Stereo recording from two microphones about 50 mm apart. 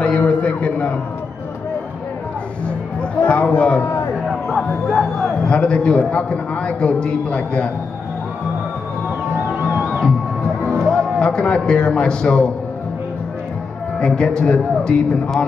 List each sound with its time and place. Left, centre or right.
0.0 s a sound: left
3.0 s a sound: left
4.6 s music: centre
5.4 s a man's voice: centre
10.6 s music: left
13.9 s a man's voice: centre